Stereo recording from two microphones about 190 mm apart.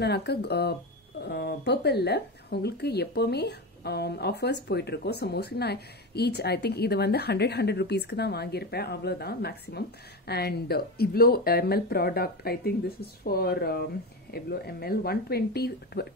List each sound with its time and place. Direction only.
0.0 s speech: 60° left (ahead or behind)